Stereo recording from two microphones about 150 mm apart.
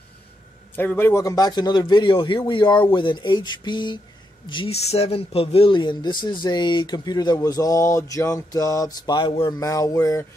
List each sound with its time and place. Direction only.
0.7 s speech: 15° left (ahead or behind); by 4.7 s 35° left (ahead or behind)
4.8 s speech: 45° left (ahead or behind)
9.6 s speech: 20° left (ahead or behind)